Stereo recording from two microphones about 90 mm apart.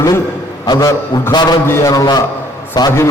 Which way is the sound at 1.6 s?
25° left (ahead or behind).